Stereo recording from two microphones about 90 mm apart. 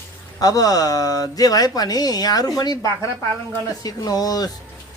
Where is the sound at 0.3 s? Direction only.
45° left (ahead or behind).